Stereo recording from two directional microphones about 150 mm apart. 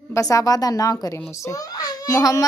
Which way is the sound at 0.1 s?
25° left (ahead or behind).